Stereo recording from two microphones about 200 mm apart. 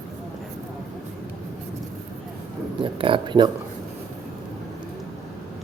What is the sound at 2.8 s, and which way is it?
Speech, 25° right (ahead or behind).